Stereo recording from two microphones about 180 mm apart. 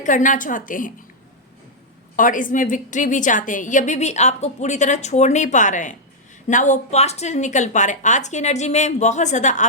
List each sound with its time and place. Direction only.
0.0 s a woman's voice: 45° left (ahead or behind)
2.1 s a woman's voice: 50° left (ahead or behind)